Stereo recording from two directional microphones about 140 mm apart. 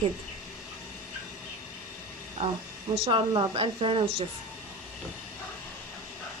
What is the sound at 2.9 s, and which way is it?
A woman's voice, 40° right (ahead or behind).